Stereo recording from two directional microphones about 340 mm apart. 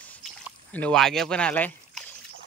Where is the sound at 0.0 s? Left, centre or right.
Centre.